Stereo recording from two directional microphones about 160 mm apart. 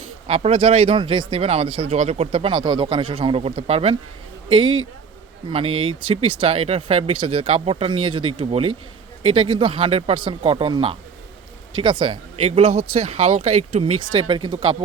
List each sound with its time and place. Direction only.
0.3 s speech: 40° right (ahead or behind)